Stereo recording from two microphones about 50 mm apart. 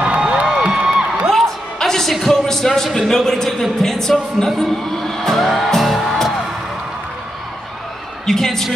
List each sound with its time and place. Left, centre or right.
0.0 s a sound: centre
1.3 s a sound: centre
3.4 s speech: centre
3.8 s a woman's voice: centre
4.5 s music: centre
8.3 s a woman's voice: centre